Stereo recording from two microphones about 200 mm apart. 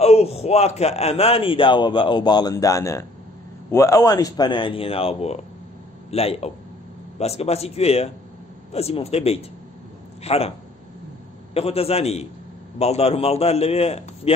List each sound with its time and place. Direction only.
0.0 s a man's voice: 30° left (ahead or behind)
11.5 s a man's voice: 30° left (ahead or behind)